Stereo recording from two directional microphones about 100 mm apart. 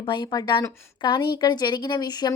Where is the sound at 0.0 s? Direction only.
50° left (ahead or behind).